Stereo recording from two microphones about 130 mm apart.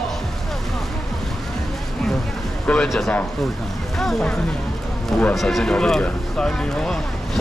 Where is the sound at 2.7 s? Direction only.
5° left (ahead or behind).